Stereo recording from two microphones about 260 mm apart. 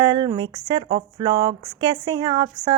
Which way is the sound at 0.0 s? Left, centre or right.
Centre.